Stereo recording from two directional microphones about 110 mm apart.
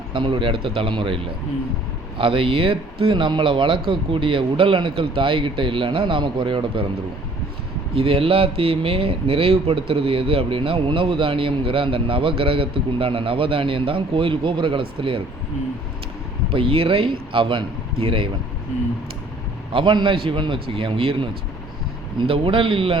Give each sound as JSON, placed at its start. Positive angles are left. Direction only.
{"t": 0.1, "sound": "speech", "side_deg": -50}
{"t": 7.9, "sound": "speech", "side_deg": -60}
{"t": 16.5, "sound": "speech", "side_deg": -55}
{"t": 19.7, "sound": "speech", "side_deg": -45}